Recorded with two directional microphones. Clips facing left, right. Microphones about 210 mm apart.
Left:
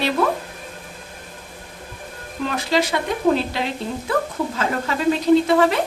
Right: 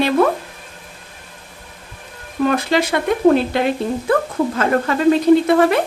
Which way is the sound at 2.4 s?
55° right (ahead or behind).